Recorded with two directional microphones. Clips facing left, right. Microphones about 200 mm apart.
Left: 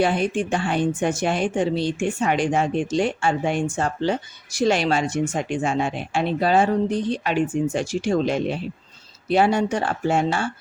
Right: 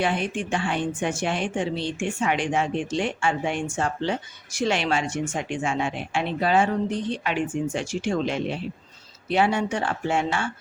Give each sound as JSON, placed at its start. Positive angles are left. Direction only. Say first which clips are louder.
{"t": 0.0, "sound": "speech", "louder": "left 5 dB", "side_deg": 35}